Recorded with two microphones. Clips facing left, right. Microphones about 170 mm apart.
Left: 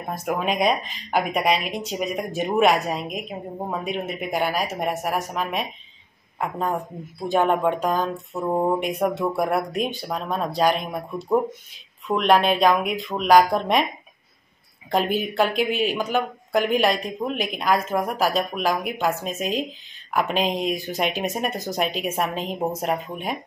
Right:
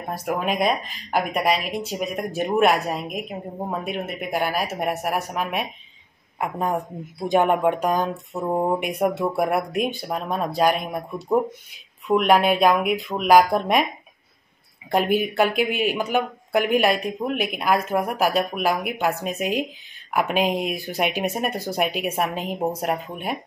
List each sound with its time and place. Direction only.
0.2 s speech: centre (ahead or behind)
14.9 s speech: 10° right (ahead or behind)